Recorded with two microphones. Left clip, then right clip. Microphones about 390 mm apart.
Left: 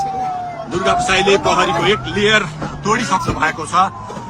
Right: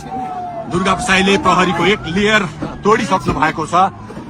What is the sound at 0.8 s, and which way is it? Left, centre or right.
A man's voice, centre.